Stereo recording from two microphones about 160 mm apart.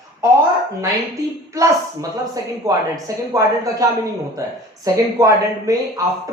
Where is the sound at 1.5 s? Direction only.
20° right (ahead or behind).